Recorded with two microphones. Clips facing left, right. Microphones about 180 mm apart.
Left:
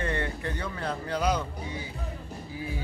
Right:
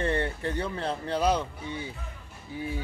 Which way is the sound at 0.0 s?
30° right (ahead or behind).